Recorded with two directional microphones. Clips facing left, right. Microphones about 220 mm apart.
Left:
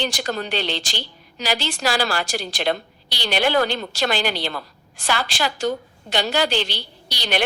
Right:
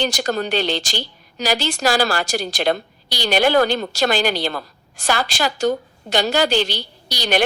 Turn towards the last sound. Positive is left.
turn(degrees=-45)  # may be behind; listen again after turning